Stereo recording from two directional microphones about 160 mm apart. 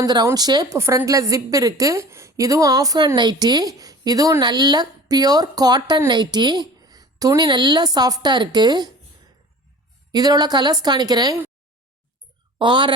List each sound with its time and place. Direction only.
0.0 s a woman's voice: 25° right (ahead or behind)
10.1 s a woman's voice: 25° right (ahead or behind)
12.5 s a woman's voice: 30° right (ahead or behind)